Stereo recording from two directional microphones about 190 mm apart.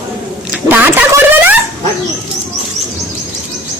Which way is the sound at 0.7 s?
10° right (ahead or behind).